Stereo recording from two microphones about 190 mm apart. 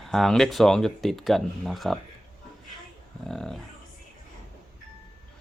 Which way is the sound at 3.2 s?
5° left (ahead or behind).